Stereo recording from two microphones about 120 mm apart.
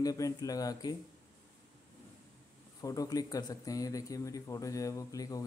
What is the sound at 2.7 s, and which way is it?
Speech, 30° left (ahead or behind).